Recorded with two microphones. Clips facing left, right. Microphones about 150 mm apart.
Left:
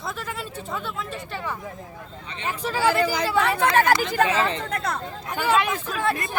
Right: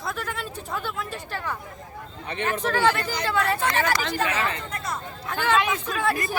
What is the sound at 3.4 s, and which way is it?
Speech, 70° left (ahead or behind).